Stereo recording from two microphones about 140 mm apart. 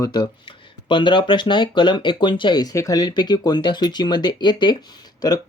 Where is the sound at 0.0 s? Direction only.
30° left (ahead or behind).